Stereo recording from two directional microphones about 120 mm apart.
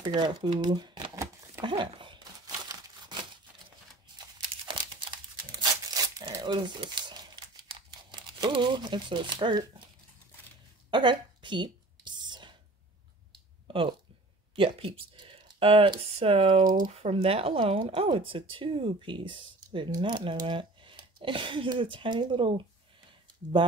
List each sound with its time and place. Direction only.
0.0 s speech: 40° right (ahead or behind)
1.6 s a sound: 40° right (ahead or behind)
4.6 s crumpling: 40° right (ahead or behind)
10.9 s a sound: 40° right (ahead or behind)
14.5 s speech: 50° right (ahead or behind)
16.9 s speech: 60° right (ahead or behind); by 22.5 s 45° right (ahead or behind)